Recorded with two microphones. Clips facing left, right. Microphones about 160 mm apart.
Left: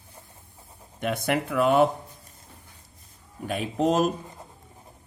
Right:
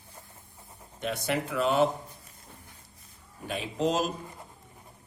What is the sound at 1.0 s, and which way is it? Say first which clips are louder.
Speech: left 4 dB; 55° left (ahead or behind).